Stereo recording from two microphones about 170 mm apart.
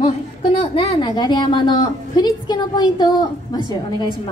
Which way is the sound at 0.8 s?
25° left (ahead or behind).